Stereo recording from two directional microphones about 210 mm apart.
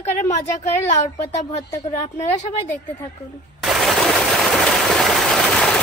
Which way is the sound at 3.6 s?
Centre (ahead or behind).